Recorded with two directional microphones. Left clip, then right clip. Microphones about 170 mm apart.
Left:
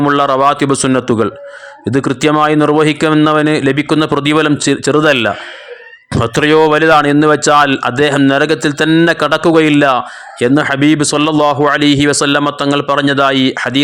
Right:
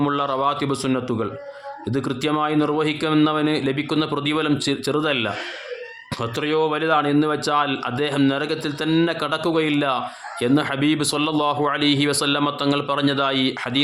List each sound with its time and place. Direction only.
0.0 s a man's voice: 40° left (ahead or behind)